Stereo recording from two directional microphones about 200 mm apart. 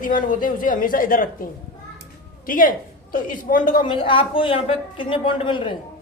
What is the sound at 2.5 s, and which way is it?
Speech, 45° left (ahead or behind).